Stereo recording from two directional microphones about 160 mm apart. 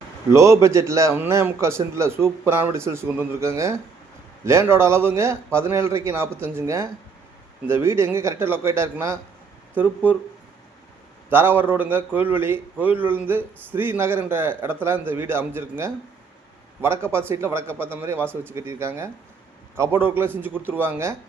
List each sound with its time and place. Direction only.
0.3 s a man's voice: 20° right (ahead or behind)
11.3 s a man's voice: 15° right (ahead or behind)